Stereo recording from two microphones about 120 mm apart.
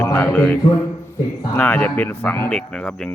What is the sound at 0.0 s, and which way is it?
Music, 20° left (ahead or behind).